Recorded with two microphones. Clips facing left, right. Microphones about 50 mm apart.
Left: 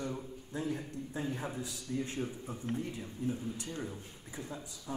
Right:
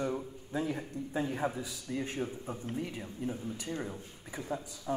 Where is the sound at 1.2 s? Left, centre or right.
Right.